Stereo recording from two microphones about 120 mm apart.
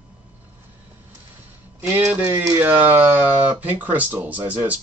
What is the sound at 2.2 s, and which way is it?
Speech, 30° right (ahead or behind).